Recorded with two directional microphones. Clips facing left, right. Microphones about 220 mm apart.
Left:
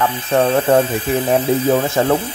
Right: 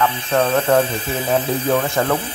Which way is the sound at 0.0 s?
20° left (ahead or behind).